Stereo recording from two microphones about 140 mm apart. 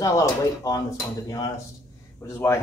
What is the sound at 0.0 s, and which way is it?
Speech, 25° left (ahead or behind).